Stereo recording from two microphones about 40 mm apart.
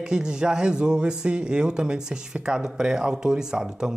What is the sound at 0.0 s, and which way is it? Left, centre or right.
Speech, centre.